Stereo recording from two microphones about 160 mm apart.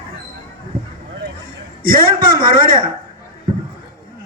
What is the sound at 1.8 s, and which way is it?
Speech, 65° right (ahead or behind).